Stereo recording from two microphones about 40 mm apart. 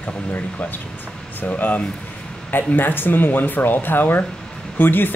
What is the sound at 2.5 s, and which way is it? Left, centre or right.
Speech, left.